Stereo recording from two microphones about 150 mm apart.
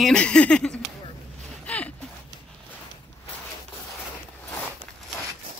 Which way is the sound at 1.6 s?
10° left (ahead or behind).